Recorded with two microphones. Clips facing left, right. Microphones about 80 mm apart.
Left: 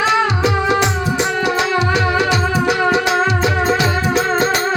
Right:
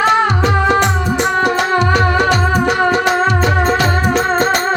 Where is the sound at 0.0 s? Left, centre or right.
Right.